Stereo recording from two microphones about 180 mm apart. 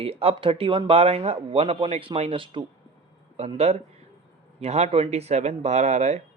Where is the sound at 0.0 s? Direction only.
35° right (ahead or behind).